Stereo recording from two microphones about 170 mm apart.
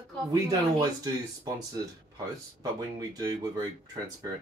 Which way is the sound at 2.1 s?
20° right (ahead or behind).